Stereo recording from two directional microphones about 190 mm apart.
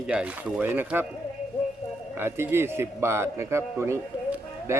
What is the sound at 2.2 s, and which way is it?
A man's voice, 10° right (ahead or behind).